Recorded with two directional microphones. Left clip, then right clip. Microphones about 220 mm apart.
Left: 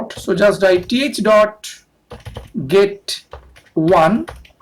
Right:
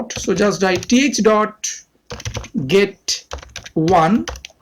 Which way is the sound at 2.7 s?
30° right (ahead or behind).